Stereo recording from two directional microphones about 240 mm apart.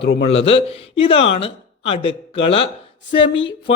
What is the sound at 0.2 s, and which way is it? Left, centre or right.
A man's voice, left.